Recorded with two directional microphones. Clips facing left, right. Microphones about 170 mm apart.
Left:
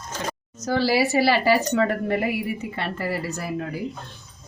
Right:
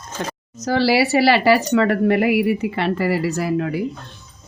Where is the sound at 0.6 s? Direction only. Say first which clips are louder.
Right 4 dB; 90° right.